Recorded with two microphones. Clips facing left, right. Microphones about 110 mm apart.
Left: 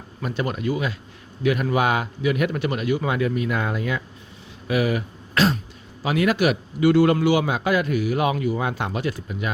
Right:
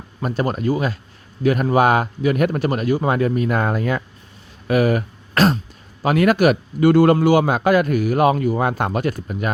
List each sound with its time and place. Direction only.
0.2 s a man's voice: 40° right (ahead or behind)